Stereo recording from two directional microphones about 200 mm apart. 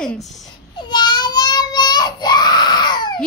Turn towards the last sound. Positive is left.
turn(degrees=20)  # may be behind; listen again after turning